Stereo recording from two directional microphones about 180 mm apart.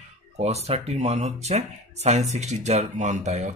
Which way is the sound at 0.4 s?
35° right (ahead or behind).